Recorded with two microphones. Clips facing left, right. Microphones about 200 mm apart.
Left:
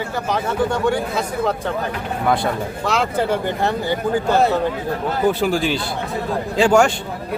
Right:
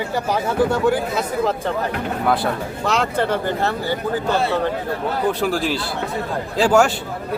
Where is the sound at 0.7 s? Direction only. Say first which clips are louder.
Right 1 dB; 5° right (ahead or behind).